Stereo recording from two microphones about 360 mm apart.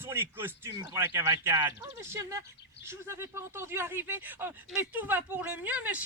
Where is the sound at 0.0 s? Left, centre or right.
Centre.